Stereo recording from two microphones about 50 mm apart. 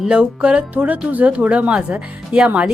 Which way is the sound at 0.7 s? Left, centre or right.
Right.